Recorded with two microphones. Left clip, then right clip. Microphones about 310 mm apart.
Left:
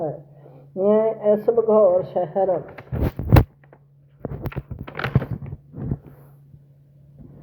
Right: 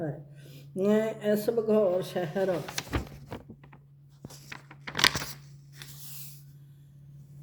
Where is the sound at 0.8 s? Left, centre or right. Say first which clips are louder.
Left 9 dB; right.